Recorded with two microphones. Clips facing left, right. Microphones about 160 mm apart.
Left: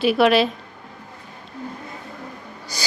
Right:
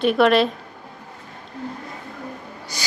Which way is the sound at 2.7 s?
35° left (ahead or behind).